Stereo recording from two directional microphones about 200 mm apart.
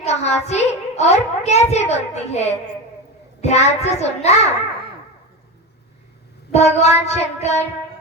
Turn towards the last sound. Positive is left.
turn(degrees=35)  # may be behind; listen again after turning